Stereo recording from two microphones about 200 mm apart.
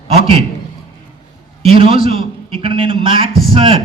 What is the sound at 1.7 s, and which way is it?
A man's voice, 25° right (ahead or behind).